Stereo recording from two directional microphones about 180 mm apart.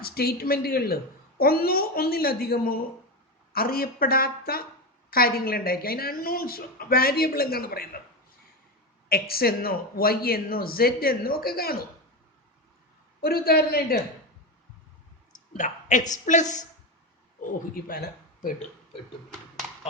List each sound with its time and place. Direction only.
0.0 s a woman's voice: 60° left (ahead or behind)
9.0 s a woman's voice: 55° left (ahead or behind)
13.2 s a woman's voice: 60° left (ahead or behind)
15.5 s a woman's voice: 45° left (ahead or behind)
17.4 s speech: 55° left (ahead or behind)